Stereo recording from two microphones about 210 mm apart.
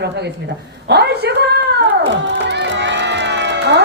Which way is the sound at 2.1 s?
60° right (ahead or behind).